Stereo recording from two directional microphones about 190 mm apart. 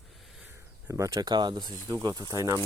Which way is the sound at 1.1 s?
20° right (ahead or behind).